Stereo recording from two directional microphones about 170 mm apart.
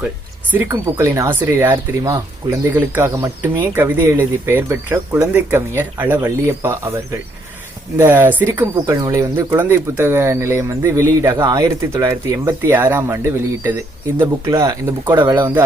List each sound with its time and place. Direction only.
0.5 s speech: 15° right (ahead or behind)
7.9 s speech: 10° right (ahead or behind)